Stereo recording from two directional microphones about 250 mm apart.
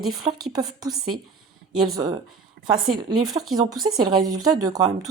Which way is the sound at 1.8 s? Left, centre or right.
Centre.